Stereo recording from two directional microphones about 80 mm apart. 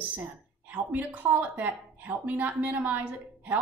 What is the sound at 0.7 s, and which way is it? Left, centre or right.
A woman's voice, right.